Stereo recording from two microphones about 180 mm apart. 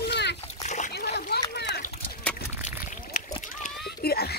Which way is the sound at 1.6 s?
60° left (ahead or behind).